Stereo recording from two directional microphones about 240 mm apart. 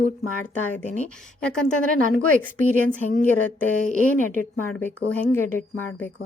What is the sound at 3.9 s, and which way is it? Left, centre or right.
Speech, right.